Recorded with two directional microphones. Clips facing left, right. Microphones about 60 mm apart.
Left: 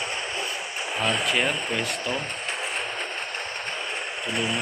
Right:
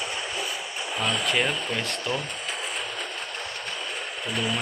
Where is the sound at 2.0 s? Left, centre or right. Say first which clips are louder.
Left 1 dB; left.